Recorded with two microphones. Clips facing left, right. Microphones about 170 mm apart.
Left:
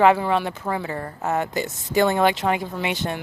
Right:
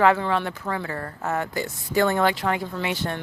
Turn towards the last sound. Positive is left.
turn(degrees=20)  # may be behind; listen again after turning